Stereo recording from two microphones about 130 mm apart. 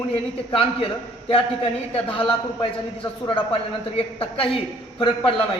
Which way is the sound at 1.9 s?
45° left (ahead or behind).